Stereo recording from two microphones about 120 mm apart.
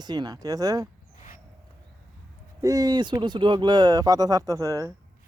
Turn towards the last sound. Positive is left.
turn(degrees=-25)  # may be behind; listen again after turning